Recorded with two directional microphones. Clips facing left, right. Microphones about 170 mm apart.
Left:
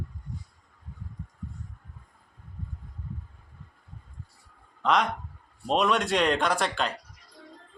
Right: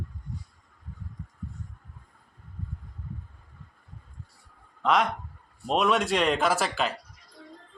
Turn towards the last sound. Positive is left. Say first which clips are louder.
# right 1 dB
turn(degrees=-5)  # may be behind; listen again after turning